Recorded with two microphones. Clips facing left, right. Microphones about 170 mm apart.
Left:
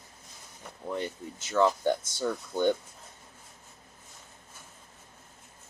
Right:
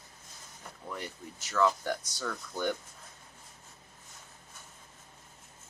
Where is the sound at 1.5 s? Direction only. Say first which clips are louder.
Left 4 dB; 25° left (ahead or behind).